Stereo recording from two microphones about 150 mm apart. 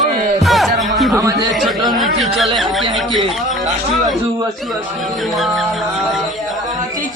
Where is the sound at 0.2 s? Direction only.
55° right (ahead or behind).